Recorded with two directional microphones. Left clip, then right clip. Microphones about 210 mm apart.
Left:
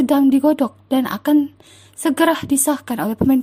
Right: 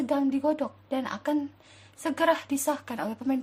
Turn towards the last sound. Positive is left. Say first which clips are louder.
# left 12 dB
turn(degrees=40)  # may be behind; listen again after turning